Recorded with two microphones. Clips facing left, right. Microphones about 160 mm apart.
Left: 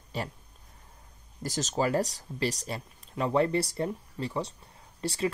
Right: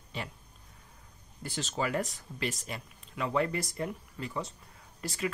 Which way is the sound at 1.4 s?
40° left (ahead or behind).